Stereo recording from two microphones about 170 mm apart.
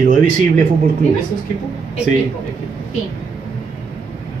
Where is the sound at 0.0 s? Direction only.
50° right (ahead or behind).